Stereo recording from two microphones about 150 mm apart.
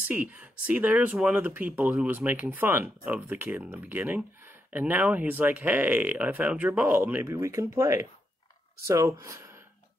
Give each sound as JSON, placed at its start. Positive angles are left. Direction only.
{"t": 0.1, "sound": "speech", "side_deg": -10}